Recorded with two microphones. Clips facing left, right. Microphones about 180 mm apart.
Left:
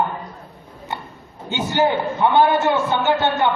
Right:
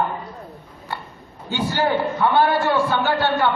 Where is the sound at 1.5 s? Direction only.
20° left (ahead or behind).